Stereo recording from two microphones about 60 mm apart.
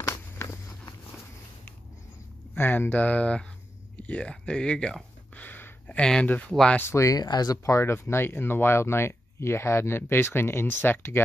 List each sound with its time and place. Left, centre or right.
0.0 s walk: left
2.5 s speech: left; by 5.0 s centre
5.3 s a sound: left
5.9 s speech: centre
6.2 s speech: left
6.9 s speech: left
7.7 s speech: left